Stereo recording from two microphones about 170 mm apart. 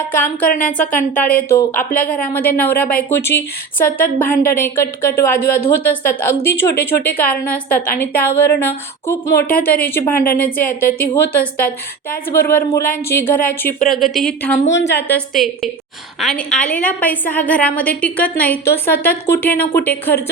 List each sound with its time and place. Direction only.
0.1 s speech: 55° left (ahead or behind)
0.6 s a woman's voice: 5° left (ahead or behind)
13.8 s a woman's voice: centre (ahead or behind)
15.3 s a woman's voice: centre (ahead or behind)